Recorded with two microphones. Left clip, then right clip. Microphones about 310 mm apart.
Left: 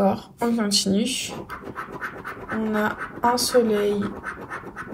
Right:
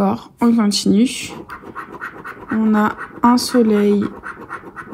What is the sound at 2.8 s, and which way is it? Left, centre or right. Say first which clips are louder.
Speech: right 3 dB; right.